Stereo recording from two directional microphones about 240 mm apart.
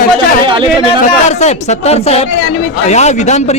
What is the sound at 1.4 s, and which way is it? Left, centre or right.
Speech, left.